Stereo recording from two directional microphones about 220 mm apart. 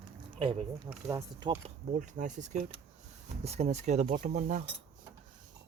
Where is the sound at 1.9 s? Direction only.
35° right (ahead or behind).